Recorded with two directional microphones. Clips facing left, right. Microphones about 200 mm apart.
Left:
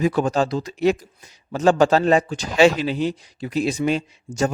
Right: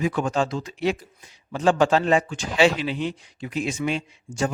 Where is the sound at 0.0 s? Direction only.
35° left (ahead or behind).